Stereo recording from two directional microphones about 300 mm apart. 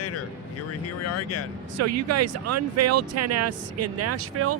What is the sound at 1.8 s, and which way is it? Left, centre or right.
Speech, right.